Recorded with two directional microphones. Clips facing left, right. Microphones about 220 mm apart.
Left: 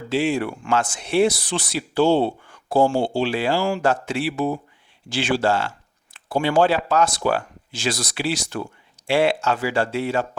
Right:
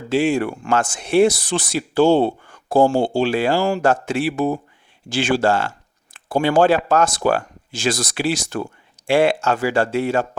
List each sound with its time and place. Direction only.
0.1 s speech: 45° right (ahead or behind)